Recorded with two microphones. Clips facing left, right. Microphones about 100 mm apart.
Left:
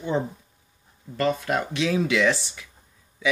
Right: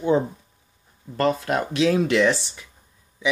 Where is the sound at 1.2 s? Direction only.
45° right (ahead or behind).